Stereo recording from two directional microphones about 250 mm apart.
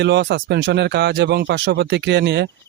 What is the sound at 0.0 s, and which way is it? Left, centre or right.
Speech, right.